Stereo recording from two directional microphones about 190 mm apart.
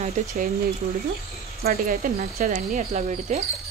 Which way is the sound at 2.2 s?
35° right (ahead or behind).